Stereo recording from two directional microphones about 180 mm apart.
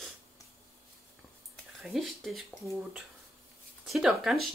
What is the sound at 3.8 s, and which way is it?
Speech, centre (ahead or behind).